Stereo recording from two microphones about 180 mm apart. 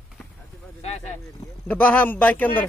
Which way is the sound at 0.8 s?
35° left (ahead or behind).